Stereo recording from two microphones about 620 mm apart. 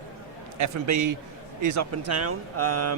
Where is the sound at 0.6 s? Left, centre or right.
Right.